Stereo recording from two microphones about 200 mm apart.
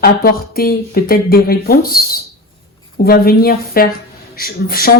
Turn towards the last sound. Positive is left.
turn(degrees=50)  # may be behind; listen again after turning